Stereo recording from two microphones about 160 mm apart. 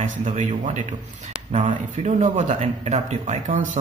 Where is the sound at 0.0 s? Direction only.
45° right (ahead or behind).